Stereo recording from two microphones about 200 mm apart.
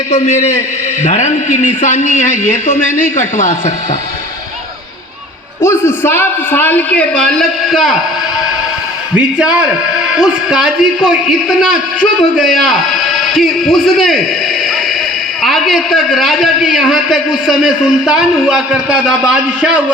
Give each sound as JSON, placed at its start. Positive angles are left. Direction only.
{"t": 0.1, "sound": "a man's voice", "side_deg": 35}
{"t": 5.6, "sound": "a man's voice", "side_deg": 10}
{"t": 9.1, "sound": "a man's voice", "side_deg": -5}
{"t": 15.4, "sound": "a man's voice", "side_deg": 0}